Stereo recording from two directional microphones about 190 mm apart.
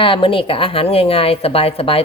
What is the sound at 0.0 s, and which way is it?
A woman's voice, 25° left (ahead or behind).